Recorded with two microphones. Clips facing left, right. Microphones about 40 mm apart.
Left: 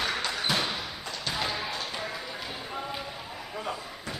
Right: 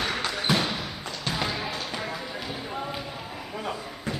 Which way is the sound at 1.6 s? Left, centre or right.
Centre.